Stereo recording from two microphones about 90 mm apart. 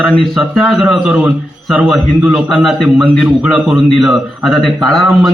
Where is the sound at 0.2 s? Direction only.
Centre (ahead or behind).